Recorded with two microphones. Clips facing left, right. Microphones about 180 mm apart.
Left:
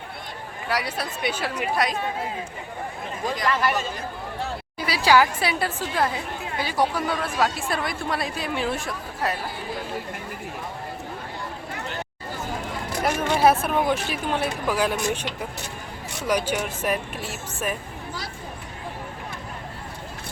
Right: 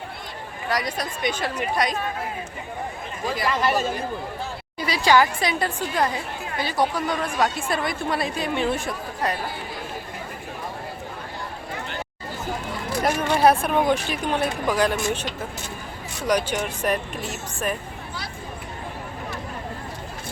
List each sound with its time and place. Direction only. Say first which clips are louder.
0.7 s speech: right 1 dB; 10° left (ahead or behind)
3.2 s speech: even; 10° right (ahead or behind)
3.6 s speech: right 2 dB; 30° right (ahead or behind)
4.8 s speech: even; 10° left (ahead or behind)
13.1 s speech: right 1 dB; 5° left (ahead or behind)